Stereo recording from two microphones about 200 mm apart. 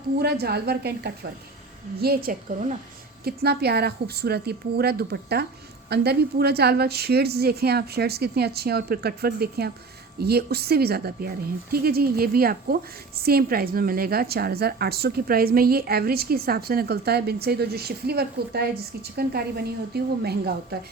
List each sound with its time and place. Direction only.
0.2 s a woman's voice: 50° right (ahead or behind)